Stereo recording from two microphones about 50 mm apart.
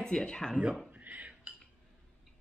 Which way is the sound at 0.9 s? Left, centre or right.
Right.